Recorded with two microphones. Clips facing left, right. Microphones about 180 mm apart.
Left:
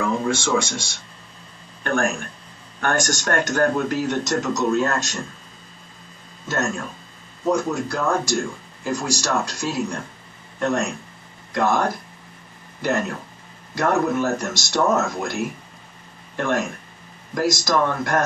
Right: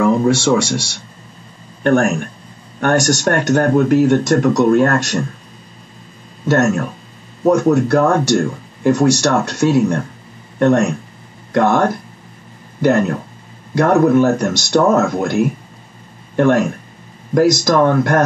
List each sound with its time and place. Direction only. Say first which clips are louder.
0.0 s speech: right 9 dB; 70° right (ahead or behind)
6.4 s speech: right 11 dB; 70° right (ahead or behind)
13.7 s speech: right 9 dB; 55° right (ahead or behind)